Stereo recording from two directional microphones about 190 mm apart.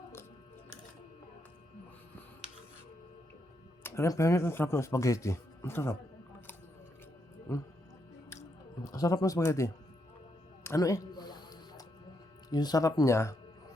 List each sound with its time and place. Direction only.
3.8 s speech: 15° left (ahead or behind)
8.8 s speech: 15° left (ahead or behind)
10.6 s music: 15° left (ahead or behind)
12.5 s speech: 20° left (ahead or behind)